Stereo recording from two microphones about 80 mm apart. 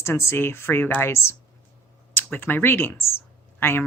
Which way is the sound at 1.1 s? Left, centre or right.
Left.